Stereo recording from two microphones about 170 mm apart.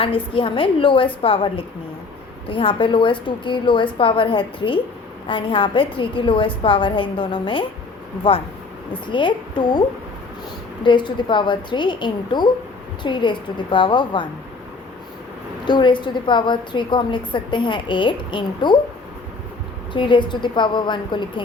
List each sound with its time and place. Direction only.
0.0 s a woman's voice: 30° left (ahead or behind)
10.8 s a woman's voice: 25° left (ahead or behind)
15.6 s a woman's voice: 25° left (ahead or behind)
19.9 s a woman's voice: 30° left (ahead or behind)